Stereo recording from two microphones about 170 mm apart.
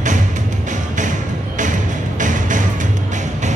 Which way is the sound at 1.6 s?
50° right (ahead or behind).